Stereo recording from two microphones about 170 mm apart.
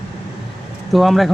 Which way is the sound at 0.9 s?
Centre (ahead or behind).